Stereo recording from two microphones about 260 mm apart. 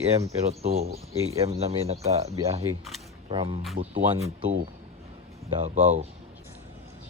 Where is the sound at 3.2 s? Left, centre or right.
Centre.